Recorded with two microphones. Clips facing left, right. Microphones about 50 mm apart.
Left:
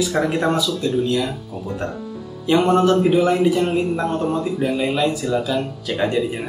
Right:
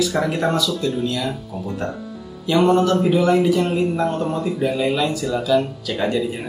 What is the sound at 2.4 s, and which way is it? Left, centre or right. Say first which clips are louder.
Speech: even; left.